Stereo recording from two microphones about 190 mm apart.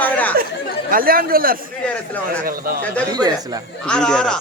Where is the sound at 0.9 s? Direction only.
50° right (ahead or behind).